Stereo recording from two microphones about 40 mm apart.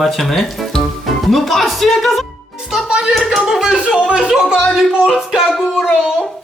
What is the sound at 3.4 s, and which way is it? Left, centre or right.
Music, centre.